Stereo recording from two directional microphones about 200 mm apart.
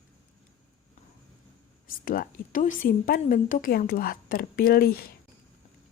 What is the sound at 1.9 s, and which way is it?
A woman's voice, 45° left (ahead or behind).